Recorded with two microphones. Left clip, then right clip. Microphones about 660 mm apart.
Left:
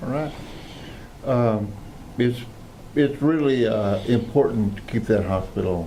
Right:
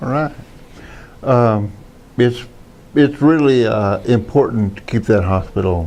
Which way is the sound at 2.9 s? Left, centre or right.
Right.